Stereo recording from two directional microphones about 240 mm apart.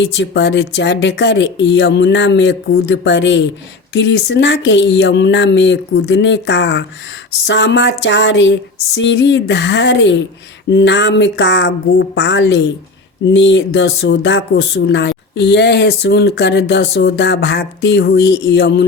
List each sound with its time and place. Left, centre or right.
0.0 s speech: left